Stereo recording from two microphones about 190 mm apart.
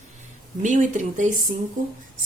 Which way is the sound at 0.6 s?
40° right (ahead or behind).